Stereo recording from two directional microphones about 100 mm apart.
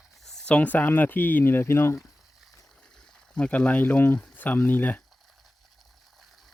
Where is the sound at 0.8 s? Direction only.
20° left (ahead or behind).